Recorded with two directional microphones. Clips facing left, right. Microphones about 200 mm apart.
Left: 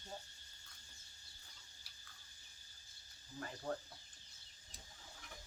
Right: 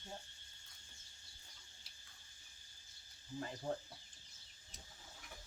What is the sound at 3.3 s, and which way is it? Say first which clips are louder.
Speech: right 2 dB; 20° right (ahead or behind).